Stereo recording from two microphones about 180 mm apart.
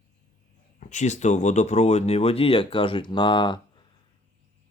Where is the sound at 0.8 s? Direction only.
45° left (ahead or behind).